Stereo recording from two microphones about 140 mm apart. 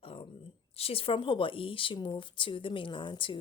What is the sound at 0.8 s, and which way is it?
Speech, 45° left (ahead or behind).